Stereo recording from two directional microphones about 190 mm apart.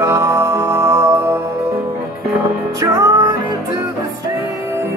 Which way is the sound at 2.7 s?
15° right (ahead or behind).